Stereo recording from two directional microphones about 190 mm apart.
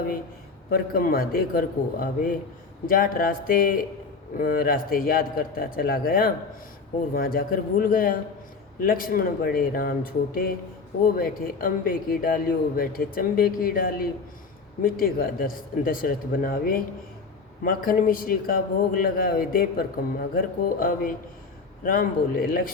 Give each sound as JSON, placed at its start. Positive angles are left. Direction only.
{"t": 0.7, "sound": "speech", "side_deg": 50}